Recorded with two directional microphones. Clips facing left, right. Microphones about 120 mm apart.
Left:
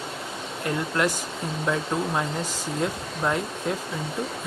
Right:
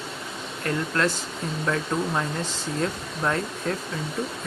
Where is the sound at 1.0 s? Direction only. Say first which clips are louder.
Even; 15° left (ahead or behind).